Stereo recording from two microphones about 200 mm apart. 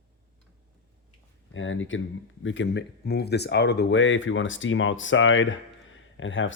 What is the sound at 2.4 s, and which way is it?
Speech, 65° left (ahead or behind).